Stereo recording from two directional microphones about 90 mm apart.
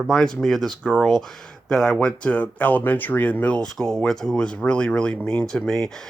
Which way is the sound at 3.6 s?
5° left (ahead or behind).